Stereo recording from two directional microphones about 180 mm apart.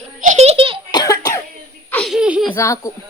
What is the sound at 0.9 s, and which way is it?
Cough, 20° left (ahead or behind).